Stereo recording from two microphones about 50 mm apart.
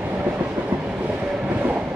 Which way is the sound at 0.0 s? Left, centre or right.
Right.